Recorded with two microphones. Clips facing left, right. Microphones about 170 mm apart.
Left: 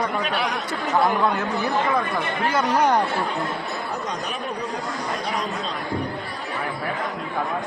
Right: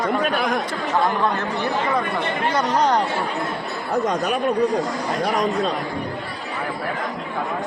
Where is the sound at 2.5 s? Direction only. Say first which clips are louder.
Even; 10° left (ahead or behind).